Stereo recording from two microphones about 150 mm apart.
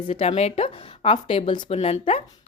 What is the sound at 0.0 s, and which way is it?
A woman's voice, 40° left (ahead or behind).